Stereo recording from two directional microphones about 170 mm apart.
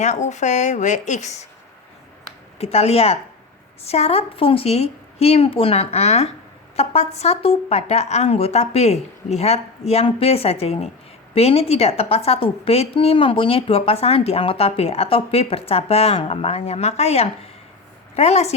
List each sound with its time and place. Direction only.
0.0 s a woman's voice: 45° left (ahead or behind)
2.6 s a woman's voice: 35° left (ahead or behind)